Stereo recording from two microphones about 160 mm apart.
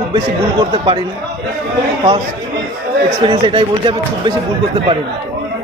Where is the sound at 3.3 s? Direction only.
30° right (ahead or behind).